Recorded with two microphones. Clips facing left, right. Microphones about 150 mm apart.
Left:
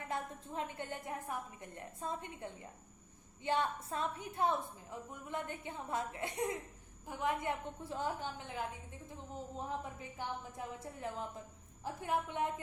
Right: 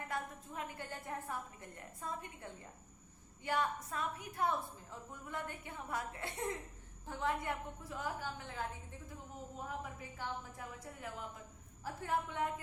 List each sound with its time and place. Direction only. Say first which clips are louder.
0.1 s a woman's voice: left 4 dB; 25° left (ahead or behind)
9.3 s a woman's voice: left 4 dB; 25° left (ahead or behind)